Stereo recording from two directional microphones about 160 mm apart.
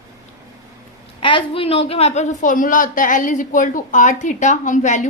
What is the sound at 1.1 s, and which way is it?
A woman's voice, 35° left (ahead or behind).